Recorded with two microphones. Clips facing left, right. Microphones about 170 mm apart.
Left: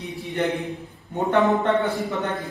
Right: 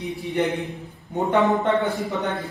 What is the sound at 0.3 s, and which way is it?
A man's voice, 20° right (ahead or behind).